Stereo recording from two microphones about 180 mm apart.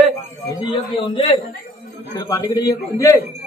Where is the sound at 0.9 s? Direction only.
25° left (ahead or behind).